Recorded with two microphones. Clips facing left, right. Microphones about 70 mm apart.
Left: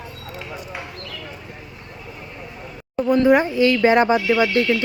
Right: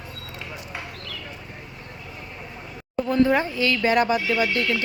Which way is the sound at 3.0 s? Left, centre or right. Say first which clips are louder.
Left 5 dB; centre.